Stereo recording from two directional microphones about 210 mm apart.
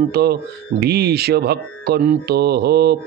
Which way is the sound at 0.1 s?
50° right (ahead or behind).